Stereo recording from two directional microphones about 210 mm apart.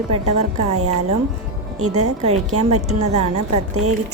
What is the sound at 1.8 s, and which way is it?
Speech, 90° right.